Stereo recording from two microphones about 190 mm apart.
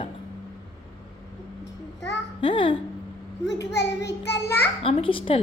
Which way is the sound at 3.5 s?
65° left (ahead or behind).